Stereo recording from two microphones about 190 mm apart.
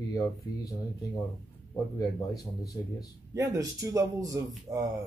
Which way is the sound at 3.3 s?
15° right (ahead or behind).